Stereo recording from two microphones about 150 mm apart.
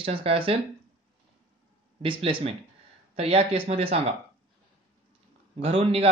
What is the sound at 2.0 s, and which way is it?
Speech, 35° right (ahead or behind).